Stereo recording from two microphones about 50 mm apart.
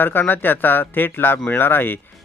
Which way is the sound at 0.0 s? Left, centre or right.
Left.